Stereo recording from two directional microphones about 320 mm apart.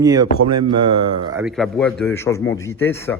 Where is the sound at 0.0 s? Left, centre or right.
Centre.